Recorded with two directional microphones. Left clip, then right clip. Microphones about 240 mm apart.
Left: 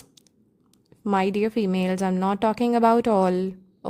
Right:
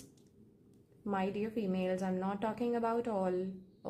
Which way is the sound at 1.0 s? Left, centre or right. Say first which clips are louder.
Left 14 dB; left.